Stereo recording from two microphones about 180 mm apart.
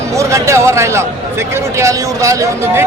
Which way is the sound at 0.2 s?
15° right (ahead or behind).